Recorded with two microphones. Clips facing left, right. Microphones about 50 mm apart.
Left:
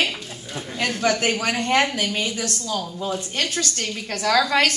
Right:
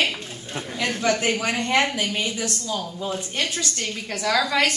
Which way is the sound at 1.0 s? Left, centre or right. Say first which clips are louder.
Left 1 dB; left.